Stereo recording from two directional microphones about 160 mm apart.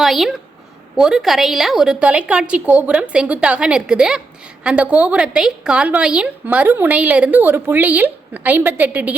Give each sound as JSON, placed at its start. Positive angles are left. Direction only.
{"t": 0.0, "sound": "a woman's voice", "side_deg": 0}